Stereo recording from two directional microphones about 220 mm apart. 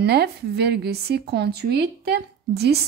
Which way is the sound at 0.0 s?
50° right (ahead or behind).